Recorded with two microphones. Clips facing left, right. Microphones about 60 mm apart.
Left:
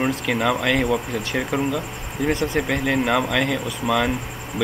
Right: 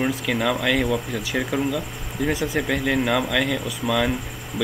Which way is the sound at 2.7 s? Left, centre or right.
Centre.